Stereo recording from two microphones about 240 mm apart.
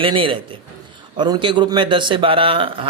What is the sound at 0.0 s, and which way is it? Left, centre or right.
A man's voice, right.